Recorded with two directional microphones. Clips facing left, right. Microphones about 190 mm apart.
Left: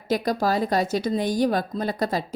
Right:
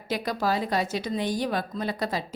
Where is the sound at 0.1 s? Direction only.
40° left (ahead or behind).